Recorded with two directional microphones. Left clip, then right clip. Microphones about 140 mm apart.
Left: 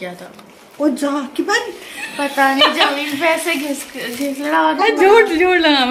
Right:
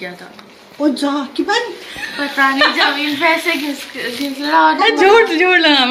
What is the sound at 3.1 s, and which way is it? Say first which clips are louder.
Speech: right 2 dB; 75° left (ahead or behind).